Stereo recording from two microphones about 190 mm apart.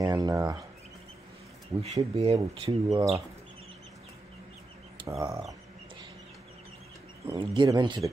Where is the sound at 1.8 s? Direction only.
30° right (ahead or behind).